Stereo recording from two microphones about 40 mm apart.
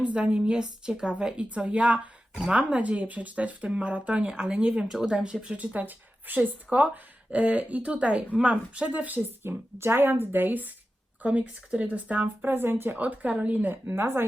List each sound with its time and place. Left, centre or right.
0.0 s a woman's voice: right
1.4 s a woman's voice: right
4.2 s a woman's voice: right
5.5 s a woman's voice: right
9.4 s speech: right
11.2 s a woman's voice: right
12.4 s speech: right
13.0 s speech: right
13.8 s speech: right